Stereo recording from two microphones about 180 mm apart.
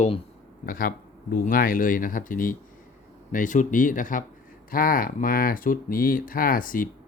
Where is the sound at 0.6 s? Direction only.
50° left (ahead or behind).